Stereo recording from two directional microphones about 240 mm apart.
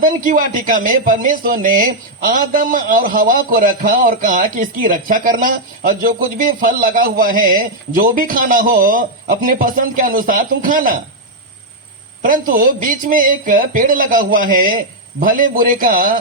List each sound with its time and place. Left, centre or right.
0.0 s speech: right
12.2 s speech: right